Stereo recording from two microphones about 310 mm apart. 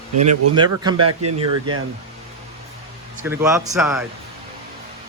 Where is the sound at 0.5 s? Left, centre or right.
Centre.